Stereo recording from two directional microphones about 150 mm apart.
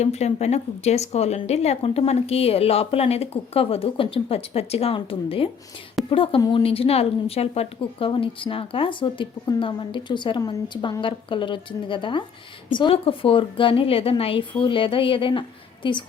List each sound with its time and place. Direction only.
0.0 s speech: 45° left (ahead or behind)